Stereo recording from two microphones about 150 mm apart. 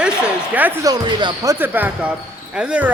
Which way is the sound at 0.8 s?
30° right (ahead or behind).